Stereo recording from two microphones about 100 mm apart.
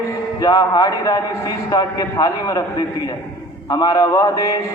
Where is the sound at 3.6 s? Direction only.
40° left (ahead or behind).